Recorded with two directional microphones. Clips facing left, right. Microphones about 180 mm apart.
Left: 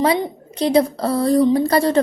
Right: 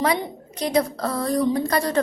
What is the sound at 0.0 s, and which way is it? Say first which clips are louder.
A woman's voice: left 5 dB; 30° left (ahead or behind).